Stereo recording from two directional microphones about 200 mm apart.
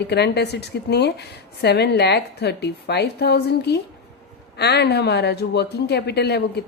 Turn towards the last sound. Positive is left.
turn(degrees=55)  # may be behind; listen again after turning